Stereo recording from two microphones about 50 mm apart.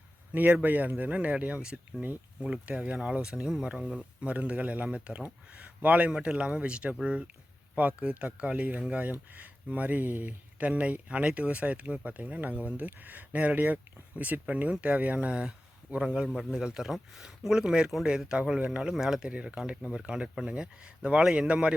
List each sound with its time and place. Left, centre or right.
0.3 s speech: right
18.9 s speech: centre
19.3 s speech: right